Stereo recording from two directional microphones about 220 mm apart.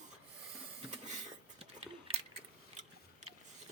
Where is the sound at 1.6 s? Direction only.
25° right (ahead or behind).